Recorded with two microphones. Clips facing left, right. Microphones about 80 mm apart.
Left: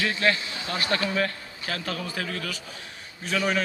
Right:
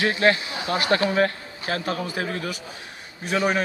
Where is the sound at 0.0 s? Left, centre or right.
Right.